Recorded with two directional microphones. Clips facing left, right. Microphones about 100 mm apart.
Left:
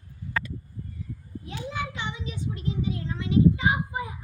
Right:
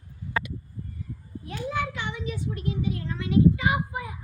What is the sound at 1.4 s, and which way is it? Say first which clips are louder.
A child's voice: right 4 dB; 20° left (ahead or behind).